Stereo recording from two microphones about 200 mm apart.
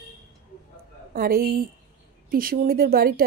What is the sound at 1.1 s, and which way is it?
Speech, 45° right (ahead or behind).